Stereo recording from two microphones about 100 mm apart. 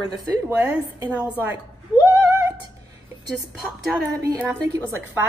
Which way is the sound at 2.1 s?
25° right (ahead or behind).